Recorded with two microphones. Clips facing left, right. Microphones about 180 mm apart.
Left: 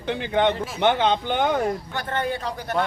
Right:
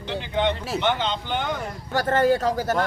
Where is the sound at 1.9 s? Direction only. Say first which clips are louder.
Right 7 dB; 40° right (ahead or behind).